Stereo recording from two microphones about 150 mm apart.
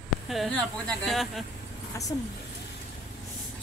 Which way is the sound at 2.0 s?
20° left (ahead or behind).